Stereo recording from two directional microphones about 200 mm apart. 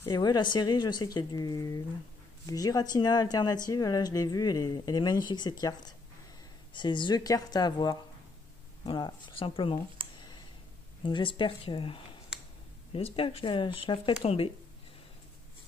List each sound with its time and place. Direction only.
0.0 s speech: 20° left (ahead or behind)
10.1 s clicking: 20° left (ahead or behind)
11.1 s speech: 25° left (ahead or behind)